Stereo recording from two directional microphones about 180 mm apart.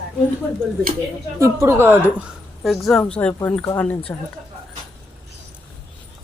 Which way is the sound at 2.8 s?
5° left (ahead or behind).